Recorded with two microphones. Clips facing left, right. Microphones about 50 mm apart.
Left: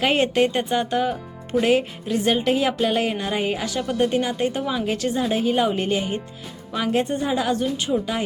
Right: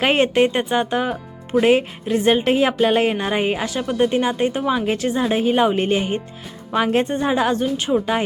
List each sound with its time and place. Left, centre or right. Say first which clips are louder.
0.0 s a woman's voice: right 3 dB; right
6.7 s a woman's voice: right 4 dB; right
7.6 s speech: right 3 dB; right